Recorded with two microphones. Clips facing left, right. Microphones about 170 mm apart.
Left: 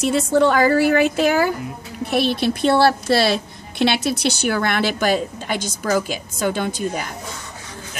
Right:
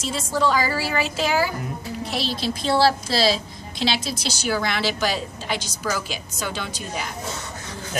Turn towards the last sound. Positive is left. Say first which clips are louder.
# left 7 dB
turn(degrees=50)  # may be behind; listen again after turning